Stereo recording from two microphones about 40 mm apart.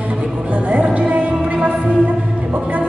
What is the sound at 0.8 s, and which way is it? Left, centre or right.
Music, right.